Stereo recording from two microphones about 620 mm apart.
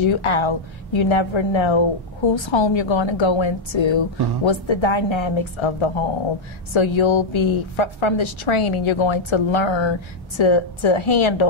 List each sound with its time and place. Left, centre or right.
0.0 s a woman's voice: left